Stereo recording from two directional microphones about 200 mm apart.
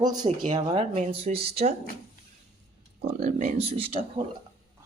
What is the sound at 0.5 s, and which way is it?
Speech, 30° right (ahead or behind).